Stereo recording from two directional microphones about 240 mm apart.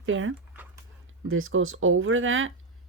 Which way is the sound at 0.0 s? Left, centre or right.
Right.